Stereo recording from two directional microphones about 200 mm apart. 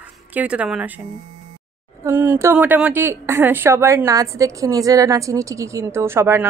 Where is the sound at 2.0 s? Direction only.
10° right (ahead or behind).